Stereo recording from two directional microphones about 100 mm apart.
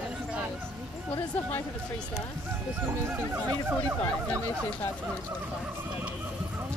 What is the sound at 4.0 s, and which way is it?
Speech, 25° left (ahead or behind).